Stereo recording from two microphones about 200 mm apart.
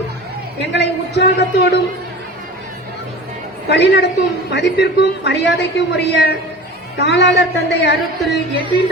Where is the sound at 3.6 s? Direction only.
60° left (ahead or behind).